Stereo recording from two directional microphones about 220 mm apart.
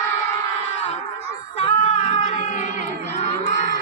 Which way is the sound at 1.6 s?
25° left (ahead or behind).